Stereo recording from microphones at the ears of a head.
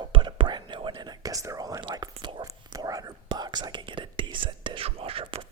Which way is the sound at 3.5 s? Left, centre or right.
Right.